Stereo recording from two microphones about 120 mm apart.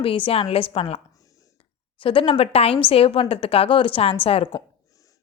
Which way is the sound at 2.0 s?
45° left (ahead or behind).